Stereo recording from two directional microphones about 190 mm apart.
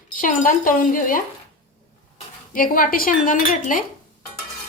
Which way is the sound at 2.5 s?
45° left (ahead or behind).